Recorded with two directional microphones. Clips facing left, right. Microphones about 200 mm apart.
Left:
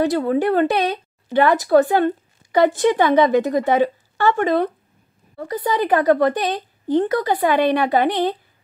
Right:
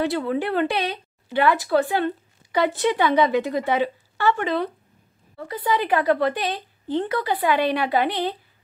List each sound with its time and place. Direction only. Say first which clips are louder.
0.0 s speech: left 5 dB; 45° left (ahead or behind)